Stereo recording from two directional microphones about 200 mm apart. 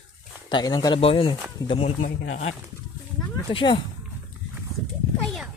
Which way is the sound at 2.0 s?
40° left (ahead or behind).